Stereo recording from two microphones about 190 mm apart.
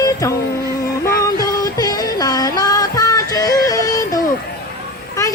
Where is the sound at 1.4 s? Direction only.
20° left (ahead or behind).